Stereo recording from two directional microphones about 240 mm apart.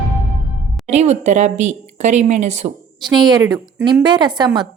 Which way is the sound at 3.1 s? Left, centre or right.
Centre.